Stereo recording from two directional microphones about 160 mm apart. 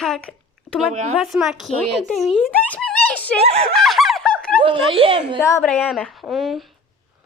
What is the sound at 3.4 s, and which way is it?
Speech, 40° right (ahead or behind).